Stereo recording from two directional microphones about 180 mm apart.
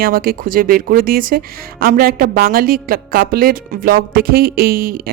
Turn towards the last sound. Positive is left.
turn(degrees=-55)  # may be behind; listen again after turning